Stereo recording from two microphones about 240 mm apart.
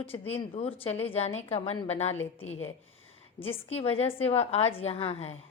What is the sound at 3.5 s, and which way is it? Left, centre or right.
A woman's voice, left.